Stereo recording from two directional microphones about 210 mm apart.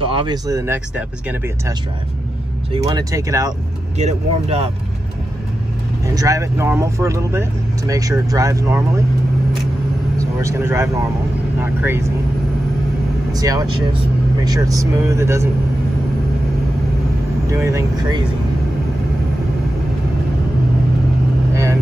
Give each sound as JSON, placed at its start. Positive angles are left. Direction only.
{"t": 0.0, "sound": "speech", "side_deg": -25}
{"t": 2.7, "sound": "speech", "side_deg": -20}
{"t": 4.0, "sound": "speech", "side_deg": -30}
{"t": 6.1, "sound": "speech", "side_deg": -15}
{"t": 10.1, "sound": "speech", "side_deg": -15}
{"t": 13.3, "sound": "speech", "side_deg": -15}
{"t": 17.5, "sound": "speech", "side_deg": -15}